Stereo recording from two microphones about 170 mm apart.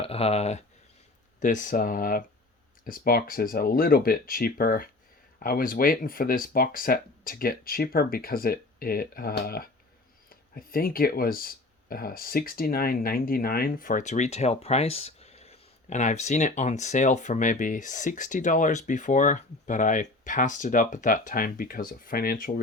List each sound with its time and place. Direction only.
0.0 s speech: 35° left (ahead or behind)
1.4 s speech: 50° left (ahead or behind)